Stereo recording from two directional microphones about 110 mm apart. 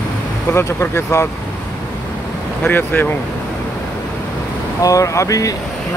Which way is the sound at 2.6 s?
15° left (ahead or behind).